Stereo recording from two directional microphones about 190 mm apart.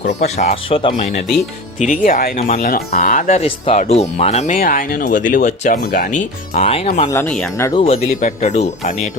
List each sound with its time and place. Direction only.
0.4 s speech: 30° left (ahead or behind)
1.9 s speech: 45° left (ahead or behind)
7.1 s speech: 10° left (ahead or behind)
7.7 s speech: 30° left (ahead or behind)